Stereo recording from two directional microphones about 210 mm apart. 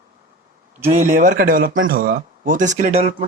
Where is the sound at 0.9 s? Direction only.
35° right (ahead or behind).